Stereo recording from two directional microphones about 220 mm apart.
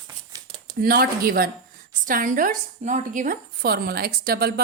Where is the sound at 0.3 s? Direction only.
20° right (ahead or behind).